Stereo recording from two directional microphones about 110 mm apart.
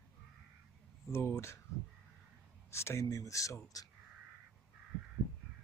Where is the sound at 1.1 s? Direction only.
25° left (ahead or behind).